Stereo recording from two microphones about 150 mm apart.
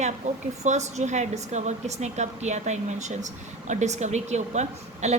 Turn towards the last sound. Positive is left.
turn(degrees=-50)  # may be behind; listen again after turning